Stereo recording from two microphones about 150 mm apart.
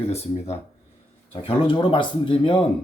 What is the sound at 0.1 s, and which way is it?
Speech, 45° left (ahead or behind).